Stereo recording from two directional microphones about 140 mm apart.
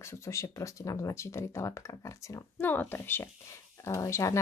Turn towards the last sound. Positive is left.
turn(degrees=20)  # may be behind; listen again after turning